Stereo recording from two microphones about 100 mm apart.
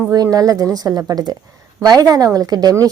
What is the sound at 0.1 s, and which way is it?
A woman's voice, 40° right (ahead or behind).